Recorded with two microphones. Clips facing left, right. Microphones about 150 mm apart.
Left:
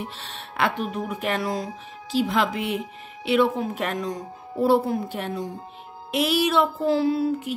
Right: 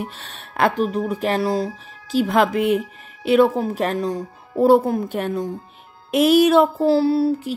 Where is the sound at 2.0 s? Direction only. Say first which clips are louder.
Right 5 dB; 50° right (ahead or behind).